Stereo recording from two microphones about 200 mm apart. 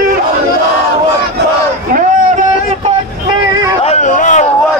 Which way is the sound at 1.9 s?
40° right (ahead or behind).